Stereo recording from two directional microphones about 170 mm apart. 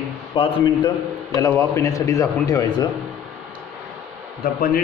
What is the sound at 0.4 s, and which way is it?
Speech, 30° left (ahead or behind).